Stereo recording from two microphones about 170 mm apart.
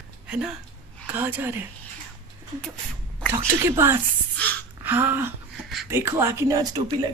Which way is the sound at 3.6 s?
15° right (ahead or behind).